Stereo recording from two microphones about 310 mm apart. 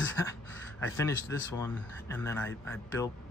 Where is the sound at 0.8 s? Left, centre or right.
Centre.